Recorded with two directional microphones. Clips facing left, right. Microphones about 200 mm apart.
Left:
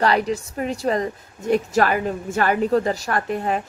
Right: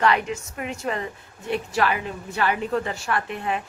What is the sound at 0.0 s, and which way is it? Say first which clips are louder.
A woman's voice: left 3 dB; 35° left (ahead or behind).